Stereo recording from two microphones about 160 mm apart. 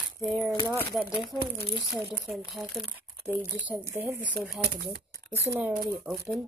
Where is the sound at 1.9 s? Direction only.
Centre (ahead or behind).